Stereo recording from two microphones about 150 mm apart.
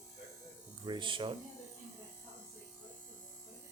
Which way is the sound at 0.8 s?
30° right (ahead or behind).